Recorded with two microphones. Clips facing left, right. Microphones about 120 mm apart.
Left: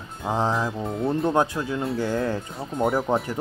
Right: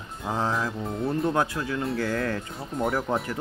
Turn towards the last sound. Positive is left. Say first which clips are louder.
# left 4 dB
turn(degrees=5)  # may be behind; listen again after turning